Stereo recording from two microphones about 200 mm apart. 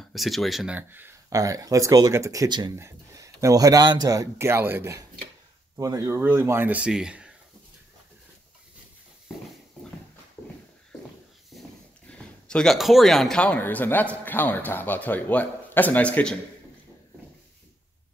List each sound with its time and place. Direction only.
0.1 s speech: centre (ahead or behind)
12.1 s speech: 5° left (ahead or behind)